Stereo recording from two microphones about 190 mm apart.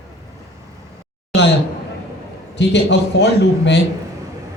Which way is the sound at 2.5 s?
65° left (ahead or behind).